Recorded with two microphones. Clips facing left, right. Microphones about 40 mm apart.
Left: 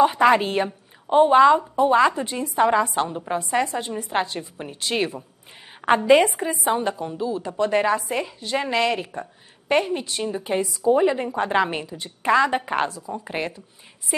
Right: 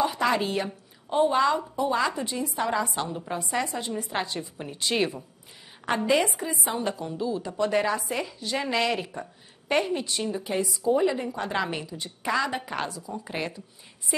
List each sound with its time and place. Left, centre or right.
0.0 s a woman's voice: left
3.1 s a woman's voice: left
3.3 s a woman's voice: left
3.7 s a woman's voice: left
5.8 s a woman's voice: left
6.8 s a woman's voice: left
10.4 s a woman's voice: left